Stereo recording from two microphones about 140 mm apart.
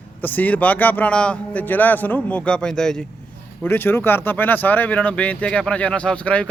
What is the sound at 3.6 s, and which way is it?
Speech, 15° left (ahead or behind).